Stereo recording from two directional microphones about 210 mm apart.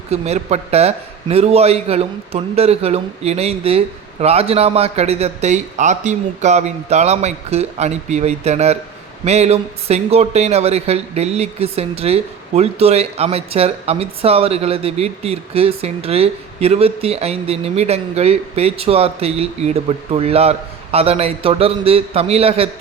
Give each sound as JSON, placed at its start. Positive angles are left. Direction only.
{"t": 0.1, "sound": "a man's voice", "side_deg": -30}